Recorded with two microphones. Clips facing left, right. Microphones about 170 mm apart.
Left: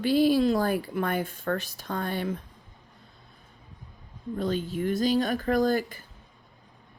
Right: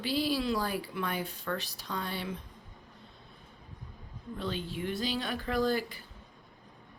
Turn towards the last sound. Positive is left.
turn(degrees=45)  # may be behind; listen again after turning